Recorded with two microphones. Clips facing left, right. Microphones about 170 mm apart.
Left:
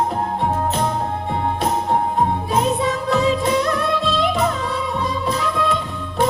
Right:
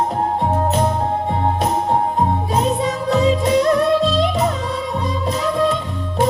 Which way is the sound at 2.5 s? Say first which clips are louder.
Even; 35° right (ahead or behind).